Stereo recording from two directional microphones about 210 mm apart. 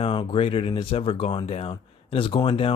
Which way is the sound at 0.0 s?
25° left (ahead or behind).